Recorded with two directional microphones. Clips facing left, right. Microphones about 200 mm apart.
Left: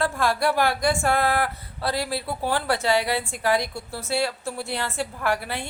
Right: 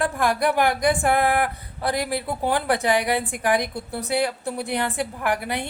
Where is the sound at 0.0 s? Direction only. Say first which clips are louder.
Right 1 dB; 15° right (ahead or behind).